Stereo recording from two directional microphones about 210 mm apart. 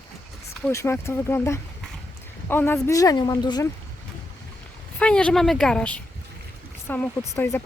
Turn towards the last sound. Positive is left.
turn(degrees=15)  # may be behind; listen again after turning